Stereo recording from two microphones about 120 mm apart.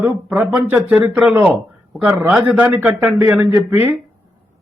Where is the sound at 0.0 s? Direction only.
15° right (ahead or behind).